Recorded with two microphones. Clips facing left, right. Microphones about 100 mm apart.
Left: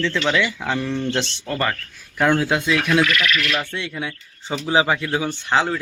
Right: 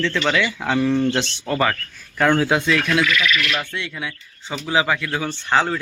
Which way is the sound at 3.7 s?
25° left (ahead or behind).